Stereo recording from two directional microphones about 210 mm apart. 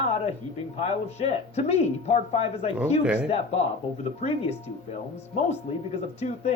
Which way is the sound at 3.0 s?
5° right (ahead or behind).